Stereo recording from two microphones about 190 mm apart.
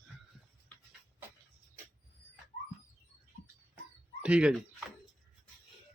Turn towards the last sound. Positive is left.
turn(degrees=-5)  # may be behind; listen again after turning